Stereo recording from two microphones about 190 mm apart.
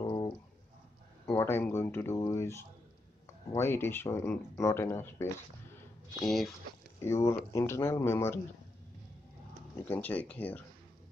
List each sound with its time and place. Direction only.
0.0 s a sound: 20° left (ahead or behind)
1.2 s speech: 15° left (ahead or behind)
6.2 s speech: centre (ahead or behind)
7.1 s speech: 15° left (ahead or behind)
9.8 s speech: 10° left (ahead or behind)